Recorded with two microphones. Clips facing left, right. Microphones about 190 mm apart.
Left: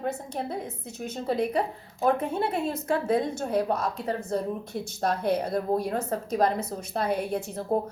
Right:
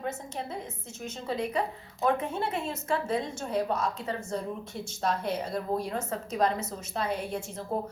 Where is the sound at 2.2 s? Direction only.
55° left (ahead or behind).